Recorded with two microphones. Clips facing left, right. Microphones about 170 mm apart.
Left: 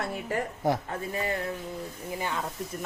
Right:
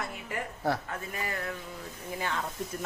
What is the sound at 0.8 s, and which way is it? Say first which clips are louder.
Speech: left 5 dB; 30° left (ahead or behind).